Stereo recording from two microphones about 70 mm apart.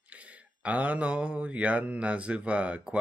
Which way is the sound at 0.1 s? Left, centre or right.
Centre.